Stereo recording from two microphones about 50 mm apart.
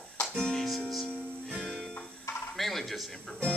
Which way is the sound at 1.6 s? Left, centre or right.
Centre.